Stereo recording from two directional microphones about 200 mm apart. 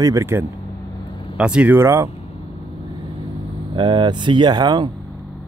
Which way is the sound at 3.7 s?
25° right (ahead or behind).